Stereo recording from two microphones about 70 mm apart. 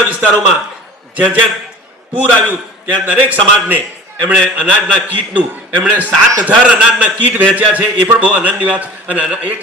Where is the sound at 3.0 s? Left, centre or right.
Right.